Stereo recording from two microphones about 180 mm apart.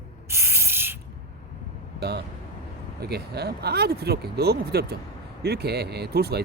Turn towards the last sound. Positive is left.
turn(degrees=-65)  # may be behind; listen again after turning